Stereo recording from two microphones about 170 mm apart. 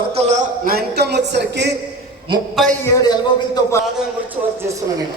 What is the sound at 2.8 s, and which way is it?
Speech, 25° left (ahead or behind).